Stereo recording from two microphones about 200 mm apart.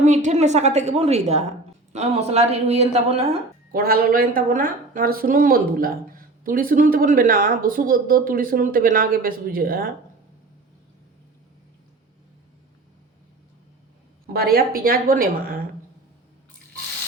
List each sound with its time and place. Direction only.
0.0 s a woman's voice: 35° right (ahead or behind)
3.7 s a woman's voice: 45° right (ahead or behind)
14.3 s a woman's voice: 50° right (ahead or behind)